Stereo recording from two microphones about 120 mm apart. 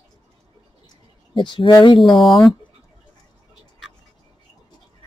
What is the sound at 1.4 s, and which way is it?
Speech, 45° left (ahead or behind).